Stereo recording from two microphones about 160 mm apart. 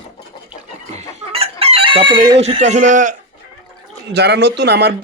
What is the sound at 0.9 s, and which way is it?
Chicken, 40° right (ahead or behind).